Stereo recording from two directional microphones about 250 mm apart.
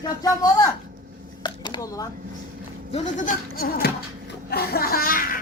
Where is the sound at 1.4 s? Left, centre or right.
Centre.